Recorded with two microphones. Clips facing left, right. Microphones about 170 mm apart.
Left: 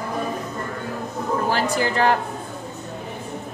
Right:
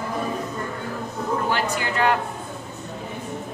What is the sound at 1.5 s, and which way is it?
Speech, 35° left (ahead or behind).